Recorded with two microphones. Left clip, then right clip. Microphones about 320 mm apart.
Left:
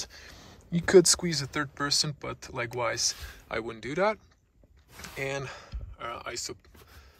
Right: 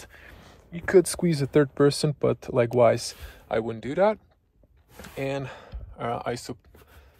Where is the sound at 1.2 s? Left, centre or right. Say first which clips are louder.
Right 9 dB; centre.